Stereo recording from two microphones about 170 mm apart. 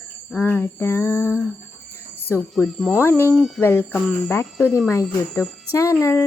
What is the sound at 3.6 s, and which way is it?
Speech, 10° left (ahead or behind).